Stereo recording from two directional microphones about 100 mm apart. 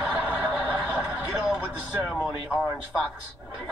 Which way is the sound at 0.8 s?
Centre (ahead or behind).